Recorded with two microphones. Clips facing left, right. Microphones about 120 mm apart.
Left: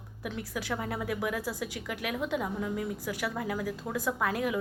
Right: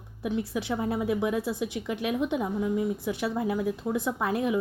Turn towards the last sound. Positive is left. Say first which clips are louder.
# right 3 dB
turn(degrees=-25)  # may be behind; listen again after turning